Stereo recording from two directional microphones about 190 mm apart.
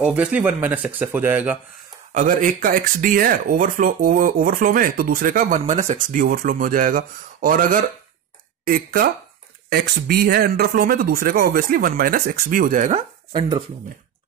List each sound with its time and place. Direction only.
0.0 s speech: 5° right (ahead or behind)
2.1 s speech: 45° right (ahead or behind)
13.3 s speech: 25° right (ahead or behind)